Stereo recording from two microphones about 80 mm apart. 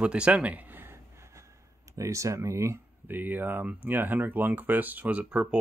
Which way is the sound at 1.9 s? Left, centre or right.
Right.